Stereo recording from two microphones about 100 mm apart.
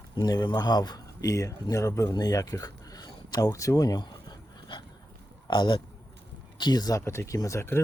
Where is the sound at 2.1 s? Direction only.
40° left (ahead or behind).